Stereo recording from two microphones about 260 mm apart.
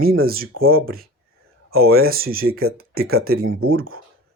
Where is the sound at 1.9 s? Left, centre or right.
Right.